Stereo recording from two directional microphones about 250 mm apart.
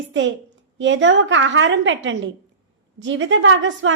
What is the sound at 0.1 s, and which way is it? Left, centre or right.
A woman's voice, right.